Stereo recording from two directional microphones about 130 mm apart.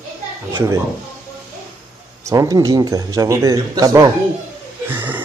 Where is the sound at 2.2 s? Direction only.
25° right (ahead or behind).